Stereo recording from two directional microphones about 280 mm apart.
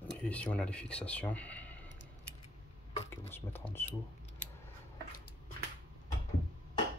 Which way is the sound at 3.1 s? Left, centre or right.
Centre.